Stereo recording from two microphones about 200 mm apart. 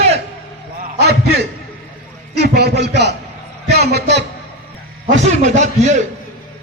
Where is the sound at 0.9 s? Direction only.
55° right (ahead or behind).